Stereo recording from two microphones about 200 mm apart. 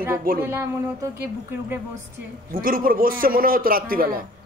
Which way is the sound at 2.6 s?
45° right (ahead or behind).